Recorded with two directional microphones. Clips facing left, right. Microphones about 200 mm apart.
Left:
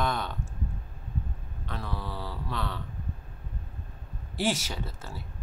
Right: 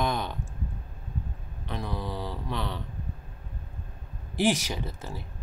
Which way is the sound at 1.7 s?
15° right (ahead or behind).